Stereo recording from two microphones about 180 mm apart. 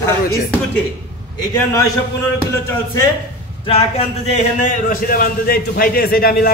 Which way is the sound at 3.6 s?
35° left (ahead or behind).